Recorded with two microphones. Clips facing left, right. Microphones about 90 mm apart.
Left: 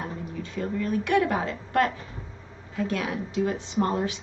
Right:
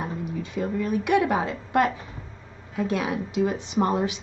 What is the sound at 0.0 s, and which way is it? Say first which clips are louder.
Speech: right 3 dB; 15° right (ahead or behind).